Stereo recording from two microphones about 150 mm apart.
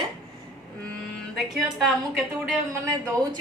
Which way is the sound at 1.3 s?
Centre (ahead or behind).